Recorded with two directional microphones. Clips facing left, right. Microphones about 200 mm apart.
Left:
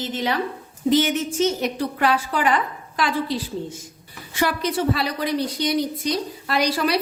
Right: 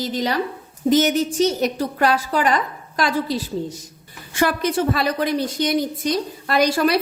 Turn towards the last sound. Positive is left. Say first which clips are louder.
# right 4 dB
turn(degrees=-50)  # may be behind; listen again after turning